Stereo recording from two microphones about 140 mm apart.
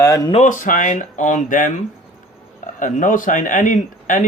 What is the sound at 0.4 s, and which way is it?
Speech, 65° left (ahead or behind).